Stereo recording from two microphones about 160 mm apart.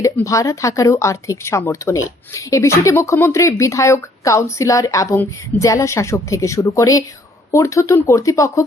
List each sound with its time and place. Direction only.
0.3 s speech: 20° left (ahead or behind)